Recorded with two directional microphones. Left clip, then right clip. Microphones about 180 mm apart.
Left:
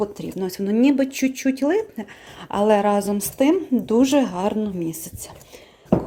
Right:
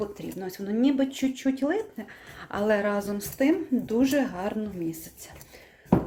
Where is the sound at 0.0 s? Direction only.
40° left (ahead or behind).